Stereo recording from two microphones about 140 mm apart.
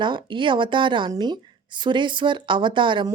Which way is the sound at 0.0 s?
35° right (ahead or behind).